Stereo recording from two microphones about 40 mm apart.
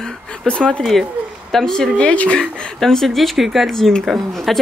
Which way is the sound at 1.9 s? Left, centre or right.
Left.